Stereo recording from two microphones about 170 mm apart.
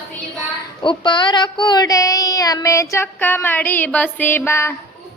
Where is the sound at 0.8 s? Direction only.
30° left (ahead or behind).